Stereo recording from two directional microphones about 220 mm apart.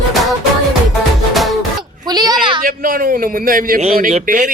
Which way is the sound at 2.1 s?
20° right (ahead or behind).